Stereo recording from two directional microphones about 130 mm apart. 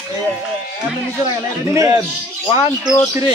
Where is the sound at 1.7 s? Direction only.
25° right (ahead or behind).